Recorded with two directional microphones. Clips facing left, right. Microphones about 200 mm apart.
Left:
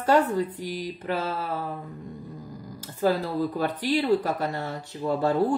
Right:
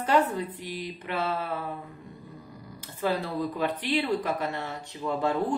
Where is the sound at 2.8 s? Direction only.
40° left (ahead or behind).